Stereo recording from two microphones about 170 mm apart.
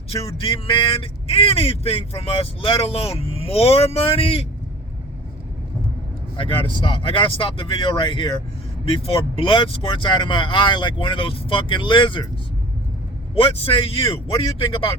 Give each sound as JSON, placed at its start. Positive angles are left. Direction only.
{"t": 0.3, "sound": "speech", "side_deg": 30}
{"t": 6.3, "sound": "speech", "side_deg": 30}
{"t": 13.3, "sound": "speech", "side_deg": 35}